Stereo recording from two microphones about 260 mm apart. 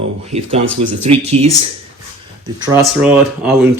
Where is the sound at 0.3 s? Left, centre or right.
Right.